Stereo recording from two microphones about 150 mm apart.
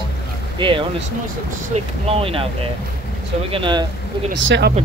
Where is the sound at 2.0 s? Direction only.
40° right (ahead or behind).